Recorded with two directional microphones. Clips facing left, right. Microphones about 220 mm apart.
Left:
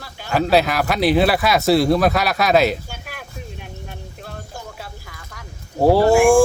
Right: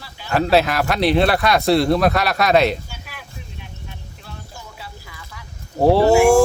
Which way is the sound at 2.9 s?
50° left (ahead or behind).